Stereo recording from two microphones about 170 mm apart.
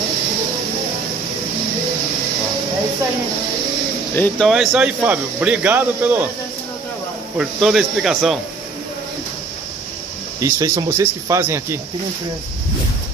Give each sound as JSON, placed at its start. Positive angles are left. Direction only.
{"t": 4.1, "sound": "speech", "side_deg": 10}
{"t": 4.5, "sound": "speech", "side_deg": -5}
{"t": 7.3, "sound": "speech", "side_deg": 0}
{"t": 10.4, "sound": "speech", "side_deg": -15}